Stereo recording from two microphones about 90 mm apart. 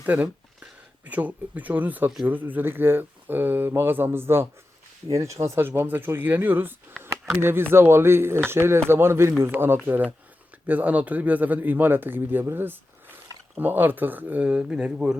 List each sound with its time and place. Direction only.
0.0 s speech: 20° right (ahead or behind)